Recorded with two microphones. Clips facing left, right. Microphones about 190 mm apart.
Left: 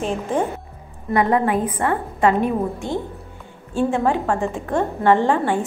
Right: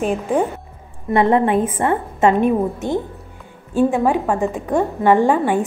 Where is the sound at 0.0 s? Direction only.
15° right (ahead or behind).